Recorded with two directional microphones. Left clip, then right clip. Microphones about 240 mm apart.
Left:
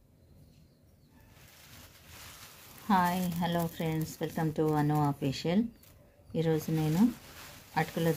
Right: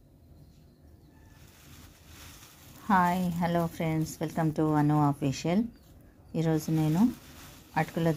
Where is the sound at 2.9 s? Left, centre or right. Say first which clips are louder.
Right 3 dB; centre.